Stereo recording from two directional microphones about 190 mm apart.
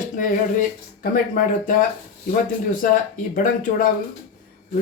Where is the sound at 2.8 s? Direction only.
45° left (ahead or behind).